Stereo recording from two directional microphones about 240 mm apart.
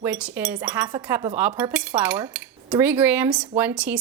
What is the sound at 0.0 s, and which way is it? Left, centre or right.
Cutlery, centre.